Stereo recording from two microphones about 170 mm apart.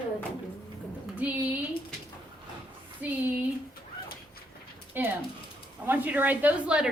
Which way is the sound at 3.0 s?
10° right (ahead or behind).